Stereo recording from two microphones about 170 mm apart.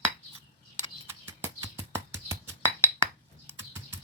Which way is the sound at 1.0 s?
15° right (ahead or behind).